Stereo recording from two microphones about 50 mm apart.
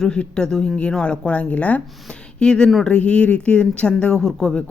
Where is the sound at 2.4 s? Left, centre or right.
Centre.